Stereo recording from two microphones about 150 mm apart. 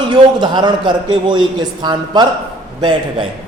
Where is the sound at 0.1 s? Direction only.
30° right (ahead or behind).